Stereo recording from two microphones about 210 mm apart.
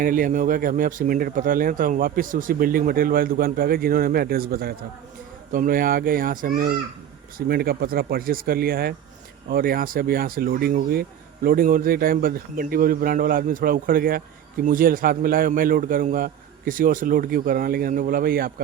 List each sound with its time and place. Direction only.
0.0 s speech: 40° right (ahead or behind)